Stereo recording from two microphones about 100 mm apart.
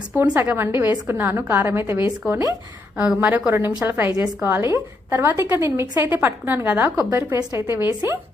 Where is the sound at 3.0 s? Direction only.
10° right (ahead or behind).